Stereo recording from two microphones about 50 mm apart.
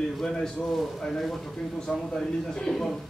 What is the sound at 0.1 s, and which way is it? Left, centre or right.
A man's voice, centre.